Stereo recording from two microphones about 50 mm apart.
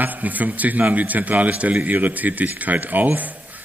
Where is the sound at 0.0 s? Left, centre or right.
Right.